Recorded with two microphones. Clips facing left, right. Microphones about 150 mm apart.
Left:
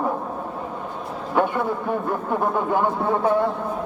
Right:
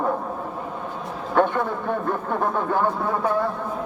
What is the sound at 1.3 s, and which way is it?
Speech, 10° left (ahead or behind).